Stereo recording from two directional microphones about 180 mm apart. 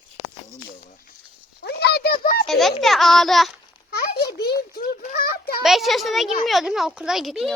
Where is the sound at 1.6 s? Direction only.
65° left (ahead or behind).